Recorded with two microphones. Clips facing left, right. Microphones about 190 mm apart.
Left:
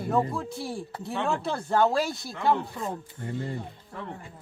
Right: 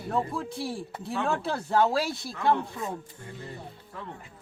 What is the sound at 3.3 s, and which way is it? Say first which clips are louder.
Speech: left 9 dB; 25° left (ahead or behind).